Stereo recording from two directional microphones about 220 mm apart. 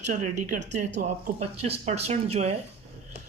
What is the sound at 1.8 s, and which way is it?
Speech, 30° right (ahead or behind).